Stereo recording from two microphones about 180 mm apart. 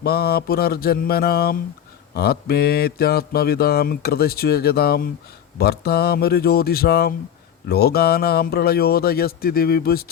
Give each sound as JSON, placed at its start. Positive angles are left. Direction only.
{"t": 0.0, "sound": "mantra", "side_deg": 60}